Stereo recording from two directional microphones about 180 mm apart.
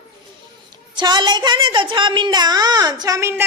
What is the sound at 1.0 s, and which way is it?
A woman's voice, 25° right (ahead or behind).